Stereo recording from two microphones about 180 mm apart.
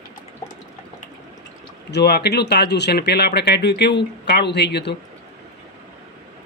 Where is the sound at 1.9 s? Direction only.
65° left (ahead or behind).